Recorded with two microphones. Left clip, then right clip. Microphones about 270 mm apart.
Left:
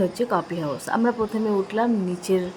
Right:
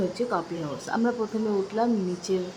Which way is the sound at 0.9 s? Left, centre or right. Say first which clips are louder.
Left 4 dB; centre.